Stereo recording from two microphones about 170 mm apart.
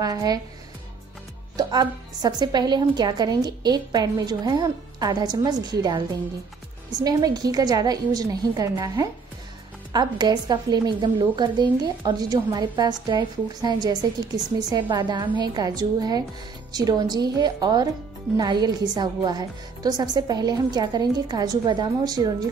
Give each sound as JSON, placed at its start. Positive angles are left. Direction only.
{"t": 0.0, "sound": "a woman's voice", "side_deg": -20}
{"t": 1.6, "sound": "a woman's voice", "side_deg": -25}